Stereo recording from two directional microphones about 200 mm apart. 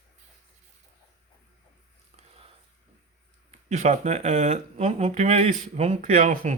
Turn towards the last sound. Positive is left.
turn(degrees=-35)  # may be behind; listen again after turning